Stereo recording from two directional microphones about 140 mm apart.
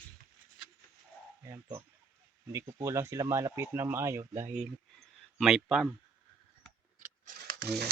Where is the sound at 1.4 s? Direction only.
20° right (ahead or behind).